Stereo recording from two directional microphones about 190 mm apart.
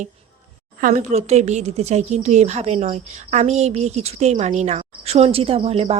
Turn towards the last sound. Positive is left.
turn(degrees=-30)  # may be behind; listen again after turning